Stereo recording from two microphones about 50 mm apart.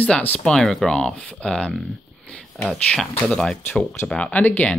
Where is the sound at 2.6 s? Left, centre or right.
Centre.